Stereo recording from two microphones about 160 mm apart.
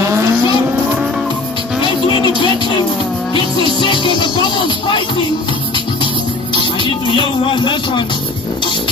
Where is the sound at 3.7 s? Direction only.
30° left (ahead or behind).